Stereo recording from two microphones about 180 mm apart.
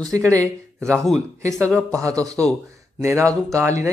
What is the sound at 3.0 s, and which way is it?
Speech, 15° right (ahead or behind).